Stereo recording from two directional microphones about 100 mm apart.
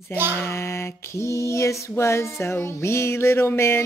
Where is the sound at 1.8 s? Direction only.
25° left (ahead or behind).